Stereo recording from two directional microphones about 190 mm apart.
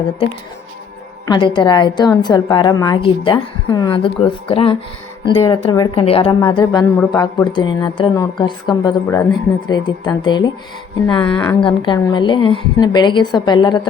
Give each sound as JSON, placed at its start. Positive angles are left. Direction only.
{"t": 1.3, "sound": "a woman's voice", "side_deg": 25}
{"t": 11.2, "sound": "a woman's voice", "side_deg": 5}
{"t": 11.6, "sound": "a woman's voice", "side_deg": 25}